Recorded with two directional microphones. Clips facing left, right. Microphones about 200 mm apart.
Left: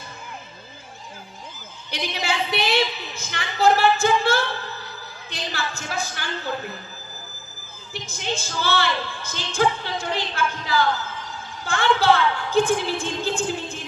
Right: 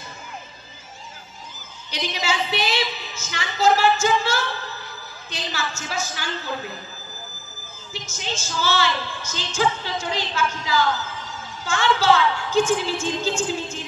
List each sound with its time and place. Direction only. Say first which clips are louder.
1.9 s a woman's voice: right 1 dB; 55° left (ahead or behind)
7.9 s a woman's voice: left 3 dB; 55° left (ahead or behind)